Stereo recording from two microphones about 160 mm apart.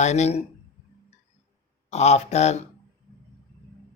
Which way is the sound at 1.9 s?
45° left (ahead or behind).